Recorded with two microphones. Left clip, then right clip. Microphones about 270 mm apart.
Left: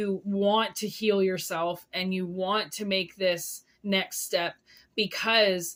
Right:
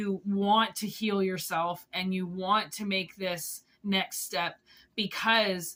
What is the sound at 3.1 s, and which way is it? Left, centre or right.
Speech, centre.